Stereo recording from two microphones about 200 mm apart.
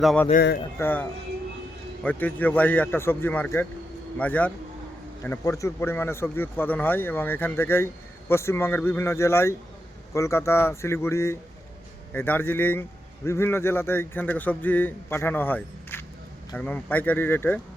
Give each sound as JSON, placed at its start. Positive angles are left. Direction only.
{"t": 0.0, "sound": "a man's voice", "side_deg": 0}
{"t": 0.3, "sound": "speech", "side_deg": 50}
{"t": 0.8, "sound": "a man's voice", "side_deg": 10}
{"t": 2.0, "sound": "a man's voice", "side_deg": 10}